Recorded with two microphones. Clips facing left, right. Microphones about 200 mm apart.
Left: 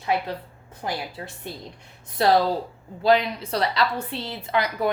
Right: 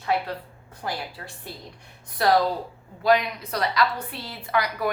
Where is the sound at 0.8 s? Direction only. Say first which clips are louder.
Left 2 dB; 20° left (ahead or behind).